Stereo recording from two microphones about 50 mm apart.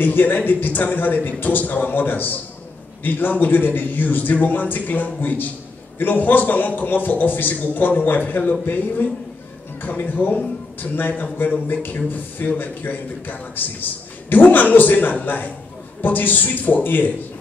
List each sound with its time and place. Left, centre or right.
0.0 s a man's voice: left